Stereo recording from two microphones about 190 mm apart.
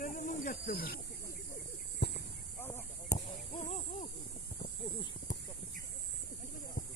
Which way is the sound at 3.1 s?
40° left (ahead or behind).